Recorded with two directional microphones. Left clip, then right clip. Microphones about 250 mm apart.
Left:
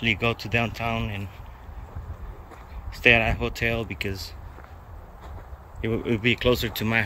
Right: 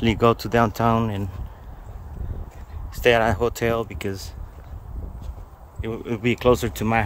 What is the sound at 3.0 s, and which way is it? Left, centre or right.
Speech, right.